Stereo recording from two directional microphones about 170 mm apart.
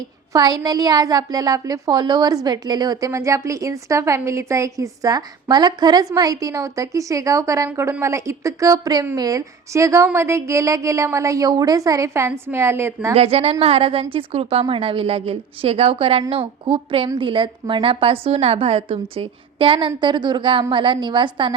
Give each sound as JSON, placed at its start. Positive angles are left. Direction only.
{"t": 0.3, "sound": "a woman's voice", "side_deg": -25}
{"t": 13.1, "sound": "a woman's voice", "side_deg": -35}